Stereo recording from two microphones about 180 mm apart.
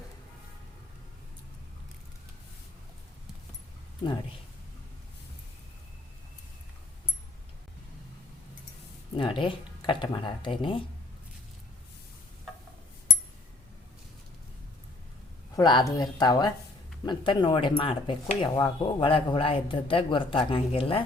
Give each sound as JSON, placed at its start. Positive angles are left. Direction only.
{"t": 9.1, "sound": "speech", "side_deg": 30}
{"t": 15.5, "sound": "speech", "side_deg": 20}